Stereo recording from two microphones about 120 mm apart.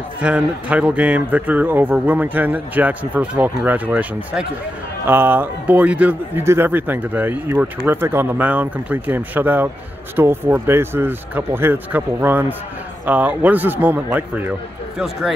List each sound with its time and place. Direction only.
0.2 s a man's voice: 10° right (ahead or behind)